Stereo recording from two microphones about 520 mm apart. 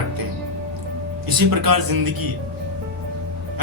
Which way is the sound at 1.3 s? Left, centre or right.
Right.